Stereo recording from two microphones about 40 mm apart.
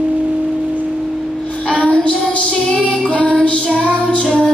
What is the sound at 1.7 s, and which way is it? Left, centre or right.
Child singing, left.